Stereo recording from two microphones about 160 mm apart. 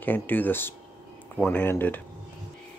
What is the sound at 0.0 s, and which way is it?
Speech, 10° left (ahead or behind).